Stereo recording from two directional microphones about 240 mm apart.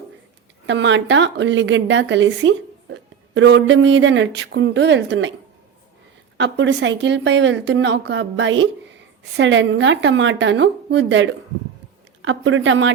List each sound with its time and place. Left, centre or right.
0.7 s a woman's voice: right
6.3 s a woman's voice: right